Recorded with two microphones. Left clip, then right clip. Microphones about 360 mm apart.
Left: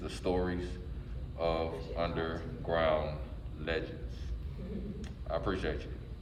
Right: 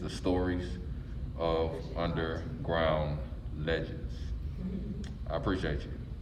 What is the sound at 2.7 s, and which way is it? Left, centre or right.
Speech, left.